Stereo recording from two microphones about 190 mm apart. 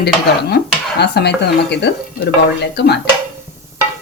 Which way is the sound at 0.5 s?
60° left (ahead or behind).